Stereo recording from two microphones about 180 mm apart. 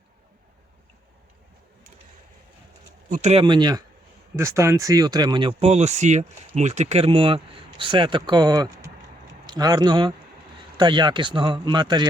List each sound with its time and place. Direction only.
3.1 s speech: 40° right (ahead or behind)
3.4 s speech: 25° right (ahead or behind)